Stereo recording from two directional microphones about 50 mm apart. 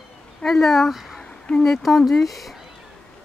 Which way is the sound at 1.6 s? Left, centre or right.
Centre.